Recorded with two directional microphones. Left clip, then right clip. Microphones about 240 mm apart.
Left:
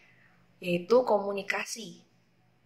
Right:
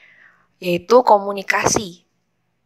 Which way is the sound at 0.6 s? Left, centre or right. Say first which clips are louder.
Right 11 dB; right.